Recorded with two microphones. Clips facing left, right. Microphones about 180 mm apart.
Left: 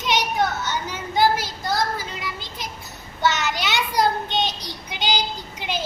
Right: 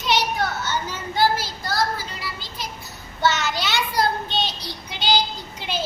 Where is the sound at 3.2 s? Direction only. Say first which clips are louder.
Even; 15° left (ahead or behind).